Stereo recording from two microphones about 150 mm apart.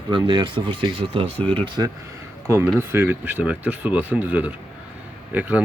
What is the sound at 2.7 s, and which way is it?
Speech, 15° right (ahead or behind).